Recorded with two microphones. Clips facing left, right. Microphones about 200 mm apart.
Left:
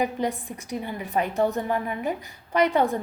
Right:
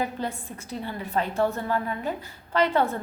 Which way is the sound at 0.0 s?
15° left (ahead or behind).